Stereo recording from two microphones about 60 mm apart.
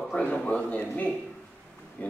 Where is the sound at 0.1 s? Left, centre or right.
Left.